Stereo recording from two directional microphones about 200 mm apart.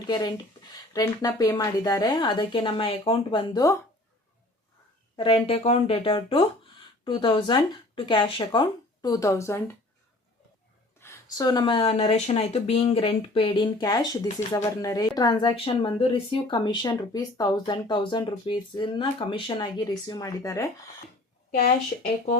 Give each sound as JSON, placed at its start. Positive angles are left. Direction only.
{"t": 0.1, "sound": "speech", "side_deg": 20}
{"t": 5.1, "sound": "speech", "side_deg": 25}
{"t": 11.0, "sound": "speech", "side_deg": 15}